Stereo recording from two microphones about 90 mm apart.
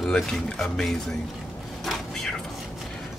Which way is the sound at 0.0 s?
5° left (ahead or behind).